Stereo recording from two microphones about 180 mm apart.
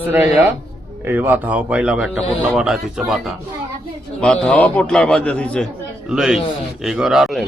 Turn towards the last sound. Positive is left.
turn(degrees=0)  # may be behind; listen again after turning